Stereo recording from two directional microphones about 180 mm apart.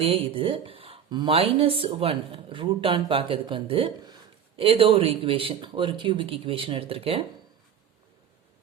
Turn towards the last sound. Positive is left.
turn(degrees=-30)  # may be behind; listen again after turning